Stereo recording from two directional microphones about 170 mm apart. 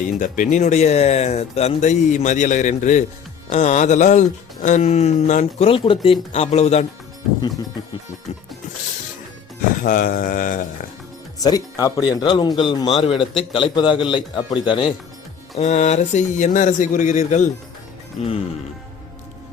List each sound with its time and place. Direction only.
0.2 s speech: 50° left (ahead or behind)
5.6 s speech: 30° left (ahead or behind)
9.8 s speech: 50° left (ahead or behind)
11.3 s speech: 20° left (ahead or behind)
15.5 s speech: 45° left (ahead or behind)